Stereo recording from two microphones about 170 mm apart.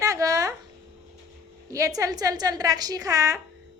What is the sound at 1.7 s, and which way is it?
A woman's voice, 20° right (ahead or behind).